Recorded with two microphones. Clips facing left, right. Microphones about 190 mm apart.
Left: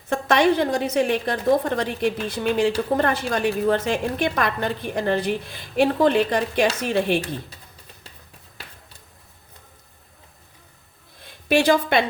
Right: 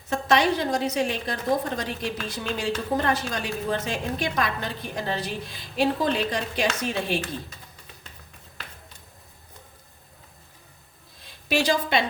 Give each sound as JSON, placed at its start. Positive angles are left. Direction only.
{"t": 0.1, "sound": "a woman's voice", "side_deg": 55}
{"t": 11.4, "sound": "a woman's voice", "side_deg": 55}